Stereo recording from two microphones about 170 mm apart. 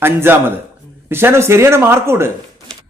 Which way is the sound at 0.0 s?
15° right (ahead or behind).